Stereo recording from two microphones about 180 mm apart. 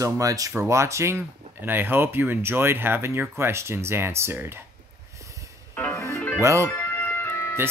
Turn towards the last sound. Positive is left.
turn(degrees=15)  # may be behind; listen again after turning